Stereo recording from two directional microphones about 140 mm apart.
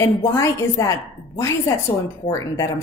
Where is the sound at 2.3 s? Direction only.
25° left (ahead or behind).